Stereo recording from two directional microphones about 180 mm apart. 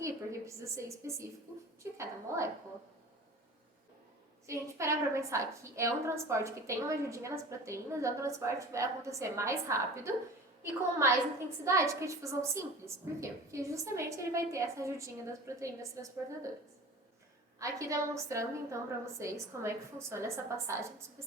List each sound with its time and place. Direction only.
0.0 s a woman's voice: 15° right (ahead or behind)
4.4 s a woman's voice: 15° right (ahead or behind)
11.6 s a woman's voice: 15° right (ahead or behind)
17.6 s a woman's voice: 15° right (ahead or behind)